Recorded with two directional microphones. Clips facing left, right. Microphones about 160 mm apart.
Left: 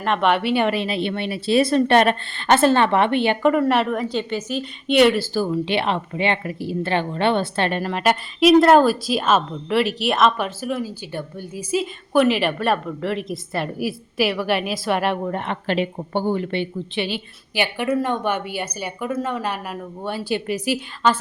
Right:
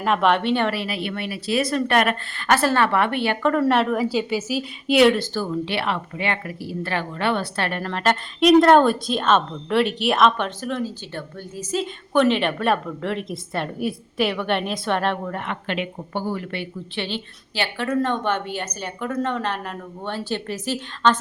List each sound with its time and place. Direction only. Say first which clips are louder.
0.0 s speech: even; centre (ahead or behind); by 3.5 s 20° left (ahead or behind)
3.6 s a woman's voice: even; centre (ahead or behind); by 17.0 s 25° left (ahead or behind)
17.0 s a woman's voice: left 2 dB; 10° left (ahead or behind)